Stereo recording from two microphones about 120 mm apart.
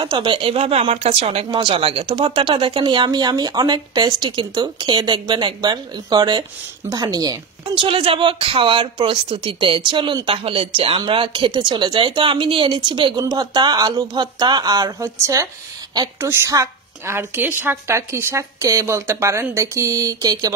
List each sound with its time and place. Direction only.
0.0 s speech: 40° right (ahead or behind); by 1.4 s 60° right (ahead or behind)
1.5 s speech: 40° right (ahead or behind)
7.7 s a woman's voice: 45° right (ahead or behind); by 20.5 s 30° right (ahead or behind)